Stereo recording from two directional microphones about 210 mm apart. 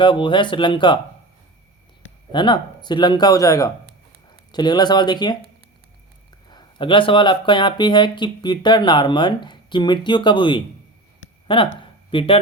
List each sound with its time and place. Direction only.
0.0 s speech: 25° left (ahead or behind)
2.3 s speech: 20° left (ahead or behind)
6.5 s speech: 20° left (ahead or behind)
11.8 s a sound: 25° left (ahead or behind)